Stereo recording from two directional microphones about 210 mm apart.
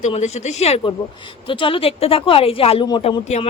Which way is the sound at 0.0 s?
35° left (ahead or behind).